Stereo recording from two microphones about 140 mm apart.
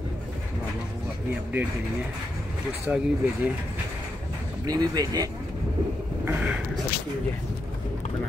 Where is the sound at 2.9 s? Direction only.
10° right (ahead or behind).